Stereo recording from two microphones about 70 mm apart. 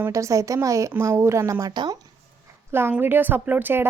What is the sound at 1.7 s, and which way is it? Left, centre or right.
Speech, right.